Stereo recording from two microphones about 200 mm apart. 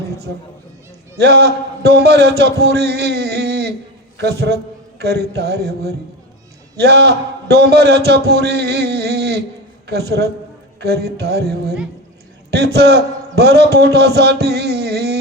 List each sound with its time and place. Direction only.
1.2 s a man's voice: 55° right (ahead or behind)